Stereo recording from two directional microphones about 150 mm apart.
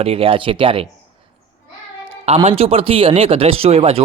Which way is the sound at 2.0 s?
40° right (ahead or behind).